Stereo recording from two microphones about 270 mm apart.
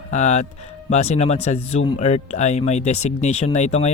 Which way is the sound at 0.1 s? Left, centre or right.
Left.